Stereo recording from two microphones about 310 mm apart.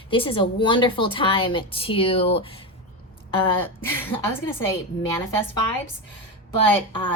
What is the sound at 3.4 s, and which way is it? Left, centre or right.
Speech, centre.